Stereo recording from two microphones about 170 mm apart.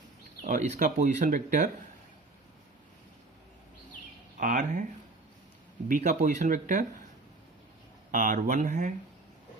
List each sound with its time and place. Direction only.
0.4 s speech: 50° right (ahead or behind)
4.4 s speech: 50° right (ahead or behind)
5.9 s speech: 45° right (ahead or behind)
8.1 s speech: 50° right (ahead or behind)